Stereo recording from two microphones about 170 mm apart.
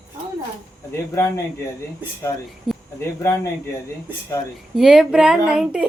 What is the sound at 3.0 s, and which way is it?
Speech, 15° left (ahead or behind).